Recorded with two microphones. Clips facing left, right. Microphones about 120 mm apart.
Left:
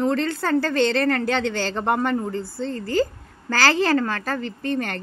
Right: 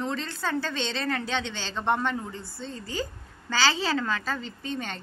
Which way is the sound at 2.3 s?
90° left.